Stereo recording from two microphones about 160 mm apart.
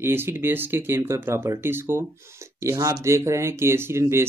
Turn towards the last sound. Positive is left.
turn(degrees=-15)  # may be behind; listen again after turning